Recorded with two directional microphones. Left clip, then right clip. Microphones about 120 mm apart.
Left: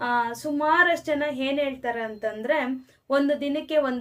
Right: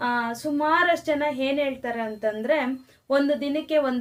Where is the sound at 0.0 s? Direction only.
25° left (ahead or behind).